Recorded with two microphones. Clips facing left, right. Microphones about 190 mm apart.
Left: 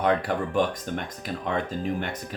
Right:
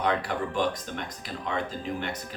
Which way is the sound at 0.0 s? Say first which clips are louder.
Left 3 dB; 50° left (ahead or behind).